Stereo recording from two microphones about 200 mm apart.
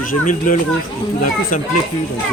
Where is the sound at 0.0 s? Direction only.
40° left (ahead or behind).